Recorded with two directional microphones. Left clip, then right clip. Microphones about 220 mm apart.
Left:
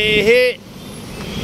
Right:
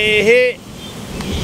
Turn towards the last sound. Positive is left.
turn(degrees=5)  # may be behind; listen again after turning